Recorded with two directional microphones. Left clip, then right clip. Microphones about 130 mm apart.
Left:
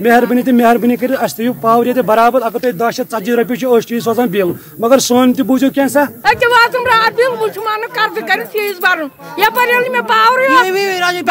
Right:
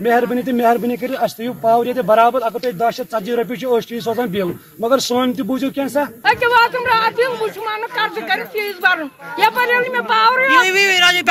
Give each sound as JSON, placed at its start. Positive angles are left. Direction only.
{"t": 0.0, "sound": "speech", "side_deg": 35}